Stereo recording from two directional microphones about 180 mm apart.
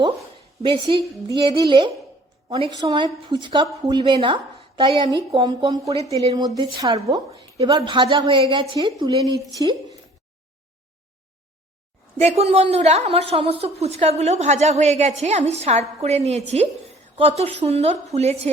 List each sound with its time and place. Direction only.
0.6 s a woman's voice: 25° right (ahead or behind)
12.2 s a woman's voice: 35° right (ahead or behind)